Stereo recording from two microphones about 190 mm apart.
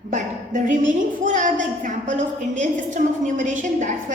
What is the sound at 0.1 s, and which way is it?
A woman's voice, 40° right (ahead or behind).